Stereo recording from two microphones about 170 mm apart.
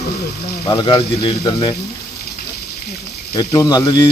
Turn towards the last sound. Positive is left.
turn(degrees=25)  # may be behind; listen again after turning